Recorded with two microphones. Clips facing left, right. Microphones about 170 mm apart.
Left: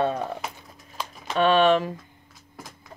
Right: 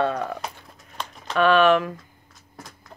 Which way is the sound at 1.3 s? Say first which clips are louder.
Right 1 dB; 25° left (ahead or behind).